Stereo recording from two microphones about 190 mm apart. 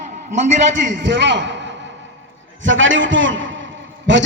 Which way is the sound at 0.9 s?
70° right (ahead or behind).